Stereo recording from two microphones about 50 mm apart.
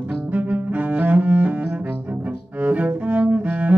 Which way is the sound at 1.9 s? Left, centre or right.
Right.